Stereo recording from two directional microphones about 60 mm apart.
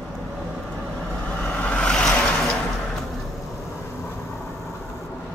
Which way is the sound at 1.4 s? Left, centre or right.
Left.